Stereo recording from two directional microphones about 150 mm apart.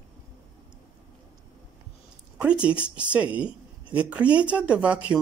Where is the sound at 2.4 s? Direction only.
5° right (ahead or behind).